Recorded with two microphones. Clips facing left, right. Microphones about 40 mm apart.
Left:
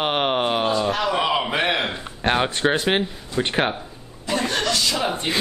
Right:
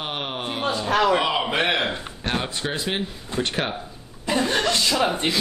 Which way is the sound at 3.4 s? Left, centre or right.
Centre.